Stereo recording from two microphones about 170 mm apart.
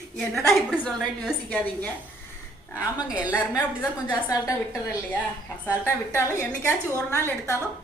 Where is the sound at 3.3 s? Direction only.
20° left (ahead or behind).